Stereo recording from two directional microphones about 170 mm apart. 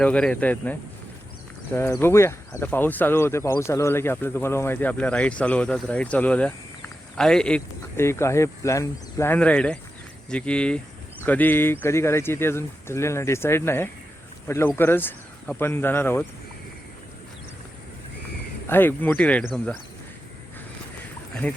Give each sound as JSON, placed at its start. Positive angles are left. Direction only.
{"t": 0.0, "sound": "speech", "side_deg": 5}
{"t": 18.7, "sound": "speech", "side_deg": 10}
{"t": 21.4, "sound": "speech", "side_deg": 10}